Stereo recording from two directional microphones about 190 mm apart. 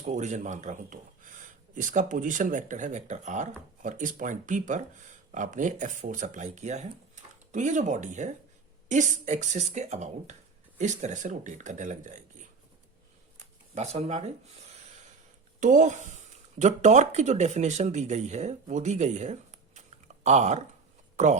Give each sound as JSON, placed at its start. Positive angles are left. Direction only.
{"t": 0.0, "sound": "speech", "side_deg": -40}
{"t": 13.3, "sound": "a sound", "side_deg": -35}
{"t": 15.6, "sound": "speech", "side_deg": -40}